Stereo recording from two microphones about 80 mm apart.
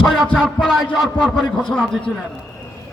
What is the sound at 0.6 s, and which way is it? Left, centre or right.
A man's voice, centre.